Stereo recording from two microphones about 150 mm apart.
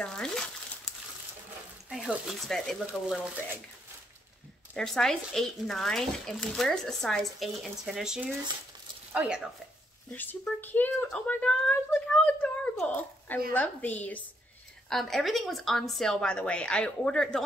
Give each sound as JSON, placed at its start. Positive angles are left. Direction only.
{"t": 0.0, "sound": "crumpling", "side_deg": 5}
{"t": 1.9, "sound": "speech", "side_deg": -5}
{"t": 2.9, "sound": "speech", "side_deg": -10}
{"t": 4.7, "sound": "speech", "side_deg": 5}
{"t": 10.1, "sound": "speech", "side_deg": 10}